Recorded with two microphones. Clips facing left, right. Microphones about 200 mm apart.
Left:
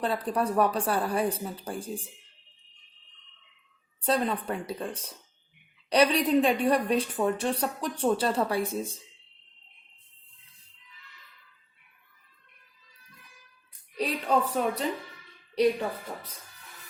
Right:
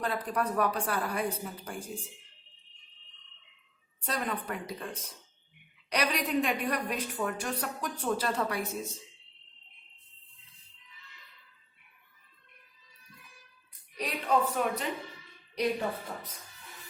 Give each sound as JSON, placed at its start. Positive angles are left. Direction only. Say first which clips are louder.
{"t": 0.0, "sound": "a woman's voice", "louder": "left 4 dB", "side_deg": 30}
{"t": 4.0, "sound": "a woman's voice", "louder": "left 7 dB", "side_deg": 30}
{"t": 13.9, "sound": "a woman's voice", "louder": "left 3 dB", "side_deg": 30}